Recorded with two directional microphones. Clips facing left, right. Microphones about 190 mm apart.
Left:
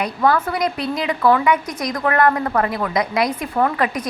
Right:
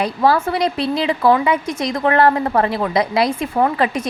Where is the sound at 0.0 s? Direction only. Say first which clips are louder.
Right 2 dB; 30° right (ahead or behind).